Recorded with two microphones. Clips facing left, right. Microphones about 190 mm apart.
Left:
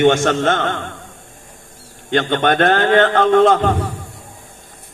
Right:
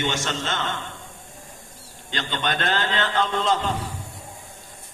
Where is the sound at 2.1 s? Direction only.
55° left (ahead or behind).